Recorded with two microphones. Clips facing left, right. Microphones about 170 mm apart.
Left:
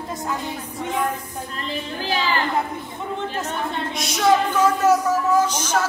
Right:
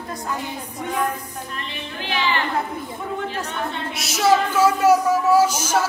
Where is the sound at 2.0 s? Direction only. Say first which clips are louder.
Even; 40° left (ahead or behind).